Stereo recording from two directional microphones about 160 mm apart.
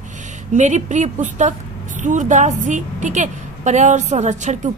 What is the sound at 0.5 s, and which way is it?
A woman's voice, 50° right (ahead or behind).